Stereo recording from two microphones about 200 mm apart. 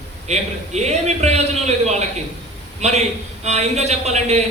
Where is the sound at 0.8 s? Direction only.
35° right (ahead or behind).